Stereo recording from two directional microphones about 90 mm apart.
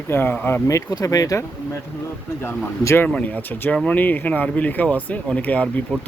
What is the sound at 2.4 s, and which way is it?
Speech, 25° left (ahead or behind).